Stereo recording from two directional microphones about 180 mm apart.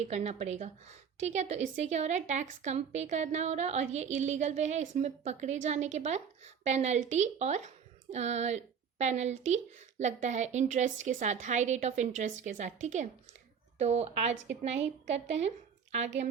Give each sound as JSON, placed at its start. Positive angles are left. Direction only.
{"t": 0.1, "sound": "a woman's voice", "side_deg": -40}